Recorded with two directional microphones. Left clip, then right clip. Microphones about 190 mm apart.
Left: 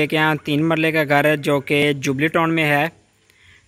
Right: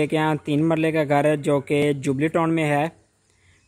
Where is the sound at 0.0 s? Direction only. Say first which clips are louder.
Left 4 dB; 5° right (ahead or behind).